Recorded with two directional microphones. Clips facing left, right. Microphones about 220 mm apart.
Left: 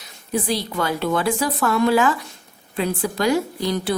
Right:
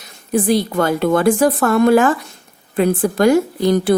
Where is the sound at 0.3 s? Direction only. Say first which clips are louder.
Right 8 dB; 50° right (ahead or behind).